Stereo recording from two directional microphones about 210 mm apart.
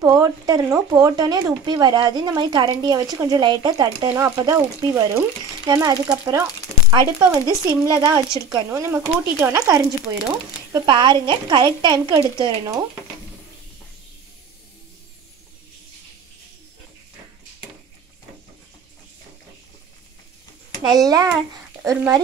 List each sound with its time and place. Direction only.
0.0 s speech: 15° right (ahead or behind)
21.1 s speech: 15° right (ahead or behind)